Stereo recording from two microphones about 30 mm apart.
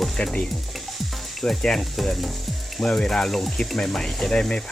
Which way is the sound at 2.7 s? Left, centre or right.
Centre.